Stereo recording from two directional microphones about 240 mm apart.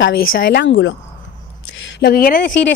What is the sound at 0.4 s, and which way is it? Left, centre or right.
A woman's voice, left.